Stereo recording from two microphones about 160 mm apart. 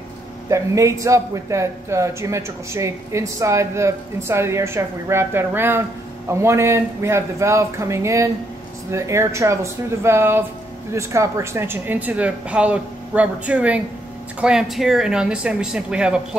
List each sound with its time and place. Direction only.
0.5 s speech: 20° right (ahead or behind)